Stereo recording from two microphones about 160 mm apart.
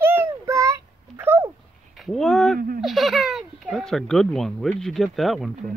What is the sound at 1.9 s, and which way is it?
Speech, centre (ahead or behind).